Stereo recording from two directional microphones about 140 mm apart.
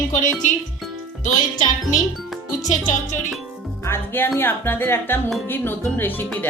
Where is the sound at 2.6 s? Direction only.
60° left (ahead or behind).